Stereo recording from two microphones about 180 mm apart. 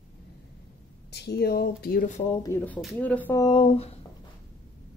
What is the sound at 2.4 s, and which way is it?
Speech, 10° left (ahead or behind).